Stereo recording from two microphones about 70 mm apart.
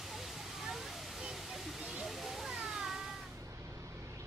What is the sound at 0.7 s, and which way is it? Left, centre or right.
Waterfall, centre.